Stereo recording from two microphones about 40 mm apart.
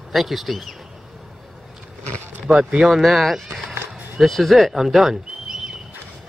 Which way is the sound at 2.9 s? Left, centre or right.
Centre.